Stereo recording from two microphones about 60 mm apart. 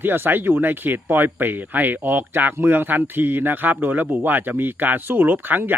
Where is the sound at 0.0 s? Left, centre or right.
Right.